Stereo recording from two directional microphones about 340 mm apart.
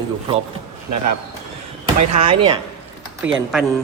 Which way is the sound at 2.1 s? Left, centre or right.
Centre.